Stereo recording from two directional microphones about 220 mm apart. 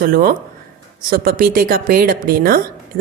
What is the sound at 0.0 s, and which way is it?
A man's voice, 40° right (ahead or behind).